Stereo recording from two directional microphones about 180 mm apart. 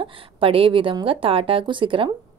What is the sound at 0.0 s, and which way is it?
A woman's voice, 30° right (ahead or behind).